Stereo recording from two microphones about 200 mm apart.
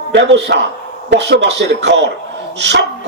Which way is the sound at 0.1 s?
60° right (ahead or behind).